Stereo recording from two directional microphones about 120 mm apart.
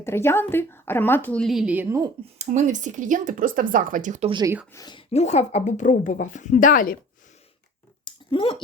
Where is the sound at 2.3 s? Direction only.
80° right.